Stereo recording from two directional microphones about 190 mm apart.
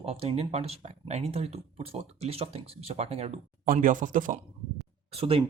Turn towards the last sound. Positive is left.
turn(degrees=-30)  # may be behind; listen again after turning